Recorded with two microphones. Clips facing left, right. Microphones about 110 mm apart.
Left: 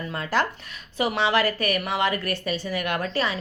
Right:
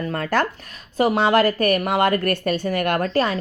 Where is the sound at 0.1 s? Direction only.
50° right (ahead or behind).